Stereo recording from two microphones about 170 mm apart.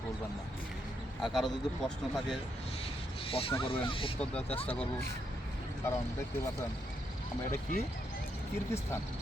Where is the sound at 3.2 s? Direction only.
35° left (ahead or behind).